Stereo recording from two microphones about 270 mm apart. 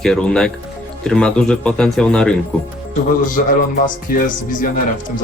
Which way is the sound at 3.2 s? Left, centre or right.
Left.